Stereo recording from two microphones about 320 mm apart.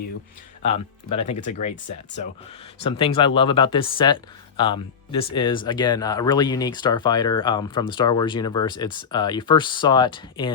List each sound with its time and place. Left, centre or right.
0.6 s speech: centre